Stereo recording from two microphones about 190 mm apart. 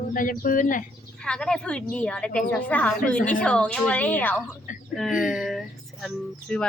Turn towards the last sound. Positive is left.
turn(degrees=0)  # may be behind; listen again after turning